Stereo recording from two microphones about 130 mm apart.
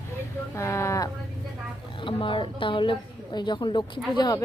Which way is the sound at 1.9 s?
40° left (ahead or behind).